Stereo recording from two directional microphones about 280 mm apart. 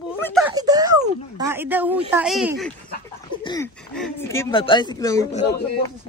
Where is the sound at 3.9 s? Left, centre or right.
Centre.